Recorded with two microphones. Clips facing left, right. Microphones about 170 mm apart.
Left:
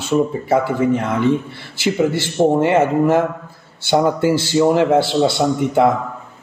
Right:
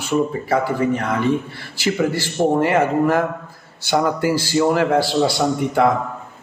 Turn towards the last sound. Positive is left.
turn(degrees=25)  # may be behind; listen again after turning